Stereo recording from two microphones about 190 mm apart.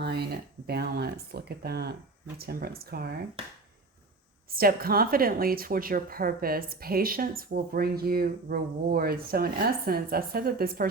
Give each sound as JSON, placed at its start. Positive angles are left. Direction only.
{"t": 0.0, "sound": "speech", "side_deg": -60}
{"t": 4.5, "sound": "speech", "side_deg": -50}